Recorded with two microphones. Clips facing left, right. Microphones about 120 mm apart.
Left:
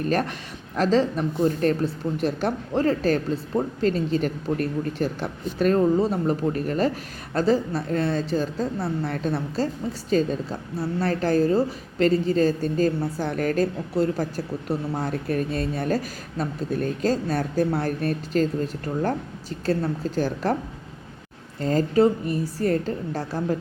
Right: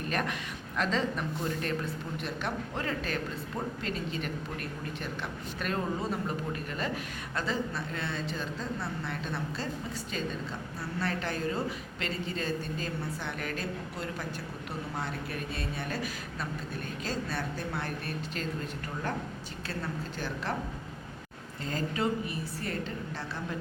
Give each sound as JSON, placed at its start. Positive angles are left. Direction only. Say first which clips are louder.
{"t": 0.1, "sound": "speech", "louder": "left 8 dB", "side_deg": 35}
{"t": 19.6, "sound": "speech", "louder": "left 13 dB", "side_deg": 40}
{"t": 21.6, "sound": "speech", "louder": "left 12 dB", "side_deg": 40}